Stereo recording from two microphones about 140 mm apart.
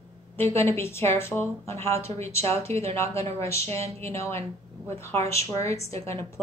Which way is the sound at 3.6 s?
45° right (ahead or behind).